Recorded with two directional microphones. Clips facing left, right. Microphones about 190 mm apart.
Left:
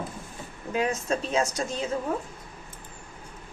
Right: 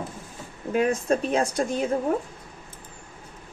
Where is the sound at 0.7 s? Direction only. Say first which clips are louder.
Right 4 dB; 55° right (ahead or behind).